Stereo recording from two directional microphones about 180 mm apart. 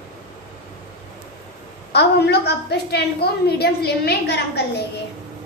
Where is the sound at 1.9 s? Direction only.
65° left (ahead or behind).